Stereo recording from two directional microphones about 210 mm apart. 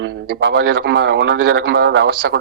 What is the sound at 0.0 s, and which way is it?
A man's voice, 50° right (ahead or behind).